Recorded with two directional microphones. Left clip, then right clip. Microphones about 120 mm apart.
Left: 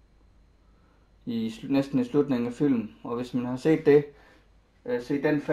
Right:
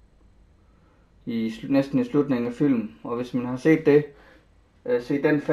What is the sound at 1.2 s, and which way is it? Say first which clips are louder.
Speech: right 3 dB; 20° left (ahead or behind).